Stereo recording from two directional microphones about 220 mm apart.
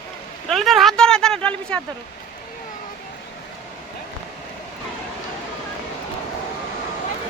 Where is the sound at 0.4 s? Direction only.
Centre (ahead or behind).